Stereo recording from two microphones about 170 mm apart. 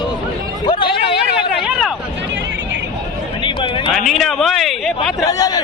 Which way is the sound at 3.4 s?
30° left (ahead or behind).